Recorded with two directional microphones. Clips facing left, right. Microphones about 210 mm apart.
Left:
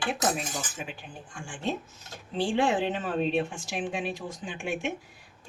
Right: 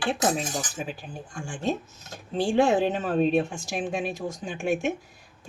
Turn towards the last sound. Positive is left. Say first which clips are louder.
# right 6 dB
turn(degrees=-45)  # may be behind; listen again after turning